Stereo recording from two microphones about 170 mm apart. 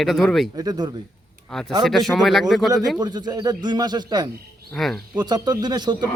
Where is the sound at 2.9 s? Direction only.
25° right (ahead or behind).